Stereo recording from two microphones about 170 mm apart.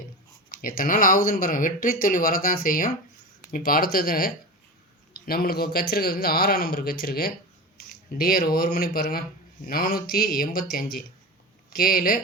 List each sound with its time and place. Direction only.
0.5 s speech: 55° left (ahead or behind)